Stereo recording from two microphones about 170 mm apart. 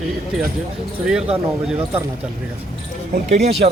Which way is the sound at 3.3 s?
40° right (ahead or behind).